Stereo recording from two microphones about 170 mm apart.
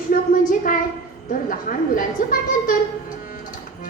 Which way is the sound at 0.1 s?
55° left (ahead or behind).